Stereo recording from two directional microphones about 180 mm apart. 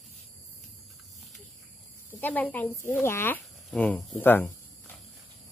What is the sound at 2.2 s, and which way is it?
Speech, 10° left (ahead or behind).